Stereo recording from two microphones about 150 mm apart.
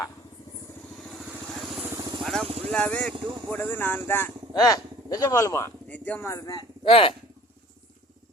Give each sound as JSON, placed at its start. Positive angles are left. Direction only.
{"t": 1.2, "sound": "vehicle", "side_deg": 0}
{"t": 2.0, "sound": "vehicle", "side_deg": -25}
{"t": 2.2, "sound": "vehicle", "side_deg": 0}
{"t": 2.7, "sound": "speech", "side_deg": 10}
{"t": 4.5, "sound": "speech", "side_deg": 25}
{"t": 6.8, "sound": "speech", "side_deg": 40}